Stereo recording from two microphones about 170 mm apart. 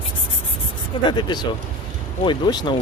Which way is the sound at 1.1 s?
25° left (ahead or behind).